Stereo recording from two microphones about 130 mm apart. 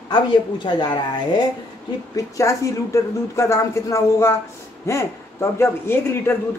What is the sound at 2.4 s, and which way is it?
Speech, 25° left (ahead or behind).